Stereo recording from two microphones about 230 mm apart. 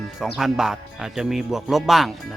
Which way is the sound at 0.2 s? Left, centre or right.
Centre.